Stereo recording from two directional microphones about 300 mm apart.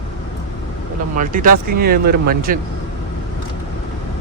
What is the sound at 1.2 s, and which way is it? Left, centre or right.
Speech, right.